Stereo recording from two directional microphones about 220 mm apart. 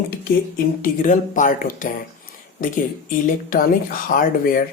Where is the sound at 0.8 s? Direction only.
35° left (ahead or behind).